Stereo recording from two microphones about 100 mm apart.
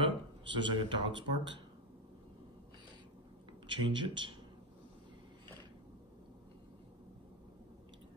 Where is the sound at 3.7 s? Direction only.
55° right (ahead or behind).